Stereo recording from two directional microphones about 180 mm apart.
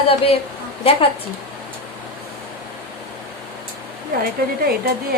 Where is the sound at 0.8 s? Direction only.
30° left (ahead or behind).